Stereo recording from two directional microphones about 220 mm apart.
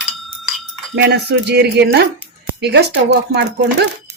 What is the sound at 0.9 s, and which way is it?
Speech, 45° right (ahead or behind).